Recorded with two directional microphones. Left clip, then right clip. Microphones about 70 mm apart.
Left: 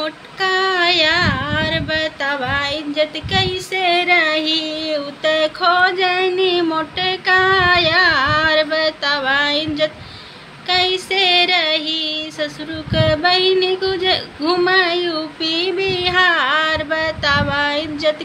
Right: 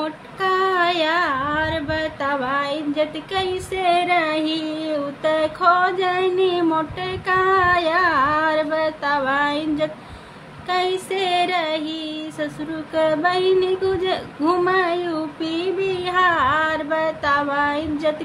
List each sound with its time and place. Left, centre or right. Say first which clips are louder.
0.0 s speech: left 3 dB; right